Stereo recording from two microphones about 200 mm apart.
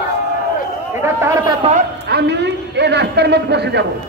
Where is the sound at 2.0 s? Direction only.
55° right (ahead or behind).